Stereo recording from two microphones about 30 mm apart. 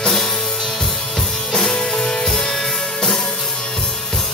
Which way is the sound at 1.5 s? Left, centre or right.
Centre.